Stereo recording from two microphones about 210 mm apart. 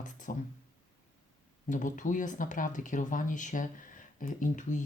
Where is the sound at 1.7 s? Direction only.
35° left (ahead or behind).